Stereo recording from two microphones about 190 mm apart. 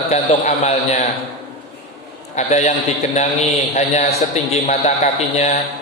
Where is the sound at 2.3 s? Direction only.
35° left (ahead or behind).